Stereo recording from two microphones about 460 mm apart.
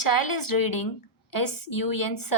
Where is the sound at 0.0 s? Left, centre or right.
Left.